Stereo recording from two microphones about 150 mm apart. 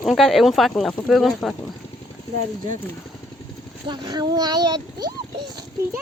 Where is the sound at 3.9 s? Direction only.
25° right (ahead or behind).